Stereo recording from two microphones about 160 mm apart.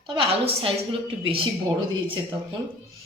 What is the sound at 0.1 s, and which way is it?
A woman's voice, 35° right (ahead or behind).